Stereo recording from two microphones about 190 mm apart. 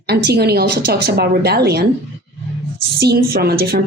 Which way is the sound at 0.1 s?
60° right (ahead or behind).